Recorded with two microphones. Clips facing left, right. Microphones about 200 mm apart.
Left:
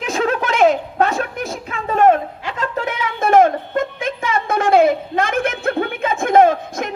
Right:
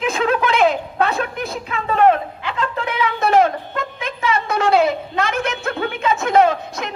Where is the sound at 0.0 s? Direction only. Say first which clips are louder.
Right 1 dB; 45° left (ahead or behind).